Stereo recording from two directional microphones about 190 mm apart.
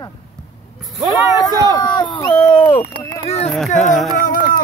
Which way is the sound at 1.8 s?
25° left (ahead or behind).